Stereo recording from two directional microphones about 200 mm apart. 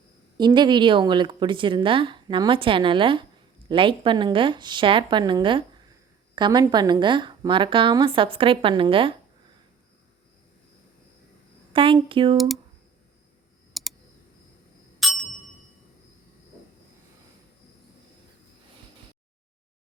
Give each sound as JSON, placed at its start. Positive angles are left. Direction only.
{"t": 0.3, "sound": "a woman's voice", "side_deg": -20}
{"t": 11.7, "sound": "a woman's voice", "side_deg": -25}
{"t": 13.7, "sound": "clicking", "side_deg": 0}
{"t": 14.9, "sound": "ding", "side_deg": 0}